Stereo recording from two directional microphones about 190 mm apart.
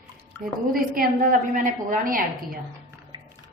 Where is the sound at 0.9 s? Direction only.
45° right (ahead or behind).